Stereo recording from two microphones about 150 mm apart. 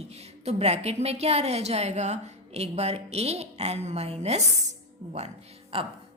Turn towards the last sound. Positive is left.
turn(degrees=-40)  # may be behind; listen again after turning